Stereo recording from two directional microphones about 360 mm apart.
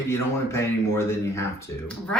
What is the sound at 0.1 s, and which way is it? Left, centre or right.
Speech, centre.